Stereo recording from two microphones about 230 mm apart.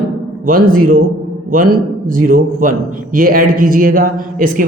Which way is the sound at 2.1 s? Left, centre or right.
Right.